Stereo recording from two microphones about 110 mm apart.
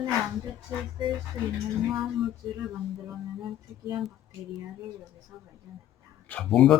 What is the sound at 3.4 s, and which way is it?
Music, 45° right (ahead or behind).